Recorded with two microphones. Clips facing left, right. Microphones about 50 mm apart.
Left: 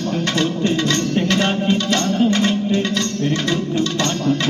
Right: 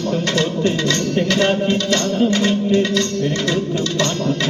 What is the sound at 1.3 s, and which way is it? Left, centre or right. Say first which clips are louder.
Music: right 1 dB; centre.